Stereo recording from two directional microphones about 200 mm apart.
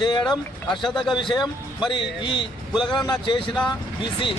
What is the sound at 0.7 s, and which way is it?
Speech, centre (ahead or behind).